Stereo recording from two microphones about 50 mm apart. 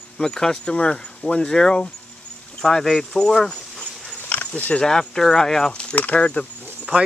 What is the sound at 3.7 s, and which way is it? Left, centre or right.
Dog, centre.